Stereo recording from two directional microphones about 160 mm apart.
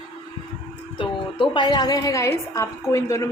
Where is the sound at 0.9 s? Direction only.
30° left (ahead or behind).